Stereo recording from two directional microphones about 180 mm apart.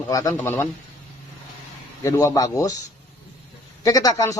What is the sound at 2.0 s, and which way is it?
Speech, 15° left (ahead or behind).